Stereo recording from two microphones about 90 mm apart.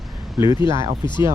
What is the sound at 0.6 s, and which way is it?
Speech, 35° right (ahead or behind).